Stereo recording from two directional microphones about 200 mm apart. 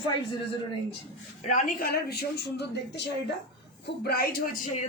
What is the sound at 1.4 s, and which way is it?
A woman's voice, 40° left (ahead or behind).